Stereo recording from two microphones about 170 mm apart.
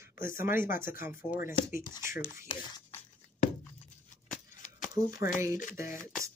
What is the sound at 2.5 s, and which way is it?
Speech, 30° left (ahead or behind).